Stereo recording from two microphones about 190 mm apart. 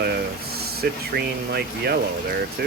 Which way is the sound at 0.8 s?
55° right (ahead or behind).